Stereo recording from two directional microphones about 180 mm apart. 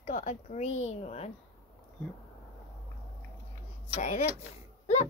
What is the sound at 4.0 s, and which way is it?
Speech, 40° left (ahead or behind).